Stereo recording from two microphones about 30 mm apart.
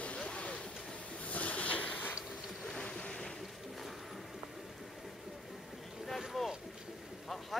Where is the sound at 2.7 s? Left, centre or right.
Left.